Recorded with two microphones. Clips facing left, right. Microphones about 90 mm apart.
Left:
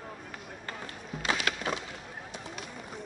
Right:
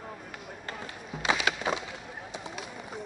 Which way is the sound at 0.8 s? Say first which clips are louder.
Right 3 dB; 20° right (ahead or behind).